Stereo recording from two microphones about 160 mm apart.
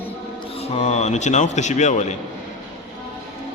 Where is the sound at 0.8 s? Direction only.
45° left (ahead or behind).